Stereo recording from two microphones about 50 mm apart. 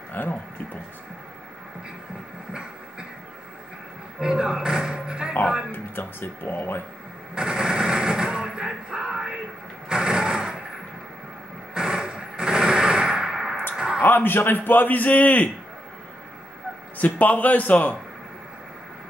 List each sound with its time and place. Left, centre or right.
0.1 s speech: left
4.2 s speech: centre
5.7 s speech: left
7.3 s a sound: centre
9.8 s vehicle: centre
11.7 s a sound: centre
14.0 s a man's voice: left
17.0 s a man's voice: left